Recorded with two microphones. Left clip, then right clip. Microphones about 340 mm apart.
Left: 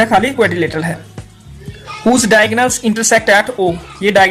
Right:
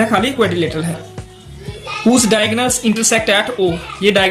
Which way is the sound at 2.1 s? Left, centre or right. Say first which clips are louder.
Left 4 dB; left.